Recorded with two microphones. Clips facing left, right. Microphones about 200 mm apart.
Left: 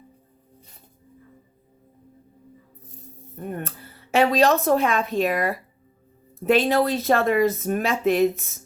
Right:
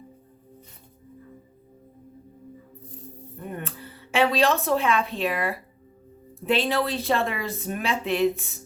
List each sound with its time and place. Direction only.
3.3 s a woman's voice: 45° left (ahead or behind)